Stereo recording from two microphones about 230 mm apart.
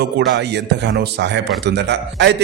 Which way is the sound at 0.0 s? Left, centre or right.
Right.